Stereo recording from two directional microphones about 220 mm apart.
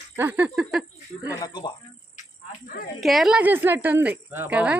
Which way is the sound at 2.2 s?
35° left (ahead or behind).